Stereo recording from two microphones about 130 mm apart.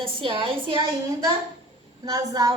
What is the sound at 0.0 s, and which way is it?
Speech, 40° right (ahead or behind).